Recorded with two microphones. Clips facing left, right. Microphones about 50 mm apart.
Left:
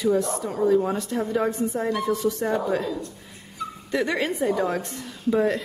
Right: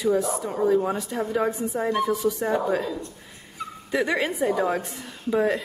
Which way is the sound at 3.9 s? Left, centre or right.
Centre.